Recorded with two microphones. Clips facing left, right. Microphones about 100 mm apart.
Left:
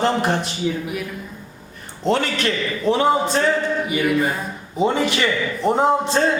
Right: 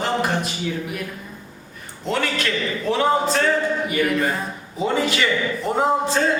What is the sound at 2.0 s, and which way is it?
Speech, 30° left (ahead or behind).